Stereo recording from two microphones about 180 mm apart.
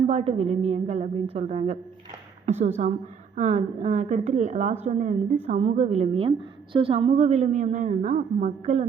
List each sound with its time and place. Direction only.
0.1 s a woman's voice: 35° right (ahead or behind)